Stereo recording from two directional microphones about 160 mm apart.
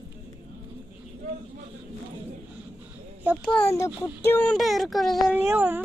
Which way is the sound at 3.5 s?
15° left (ahead or behind).